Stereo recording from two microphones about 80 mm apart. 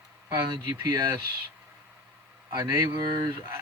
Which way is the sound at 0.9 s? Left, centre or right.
Right.